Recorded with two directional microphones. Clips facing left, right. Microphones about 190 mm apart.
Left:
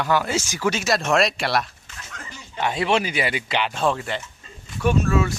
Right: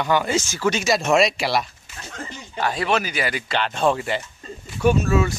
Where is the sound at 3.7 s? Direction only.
Centre (ahead or behind).